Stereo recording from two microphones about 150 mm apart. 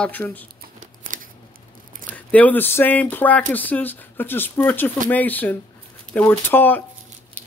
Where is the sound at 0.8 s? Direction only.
60° right (ahead or behind).